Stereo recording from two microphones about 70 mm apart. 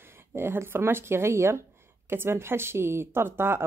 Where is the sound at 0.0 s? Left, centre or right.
Right.